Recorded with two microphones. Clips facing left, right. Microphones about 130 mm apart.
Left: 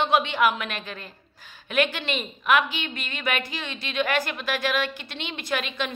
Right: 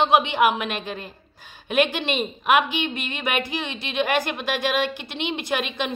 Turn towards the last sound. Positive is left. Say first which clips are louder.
# right 3 dB
turn(degrees=-20)  # may be behind; listen again after turning